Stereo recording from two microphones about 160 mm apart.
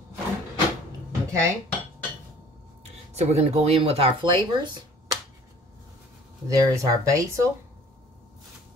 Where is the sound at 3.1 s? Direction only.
40° right (ahead or behind).